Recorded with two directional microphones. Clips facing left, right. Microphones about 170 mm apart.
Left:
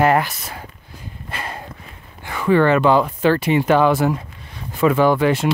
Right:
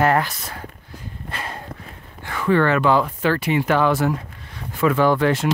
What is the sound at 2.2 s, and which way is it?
Speech, 10° left (ahead or behind).